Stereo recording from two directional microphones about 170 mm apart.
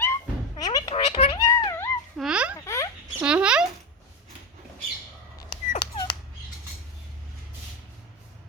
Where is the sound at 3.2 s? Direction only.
5° right (ahead or behind).